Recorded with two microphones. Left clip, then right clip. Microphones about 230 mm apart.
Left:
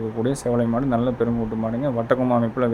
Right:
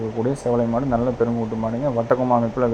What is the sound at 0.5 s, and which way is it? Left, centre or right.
A man's voice, centre.